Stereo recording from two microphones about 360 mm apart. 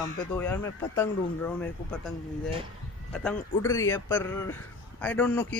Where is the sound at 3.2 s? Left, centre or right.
Centre.